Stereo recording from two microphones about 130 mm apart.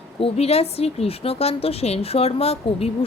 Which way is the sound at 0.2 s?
50° left (ahead or behind).